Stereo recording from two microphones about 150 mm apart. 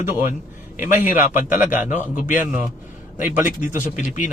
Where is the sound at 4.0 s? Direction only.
60° left (ahead or behind).